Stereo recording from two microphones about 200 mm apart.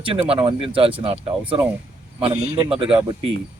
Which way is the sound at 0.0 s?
25° right (ahead or behind).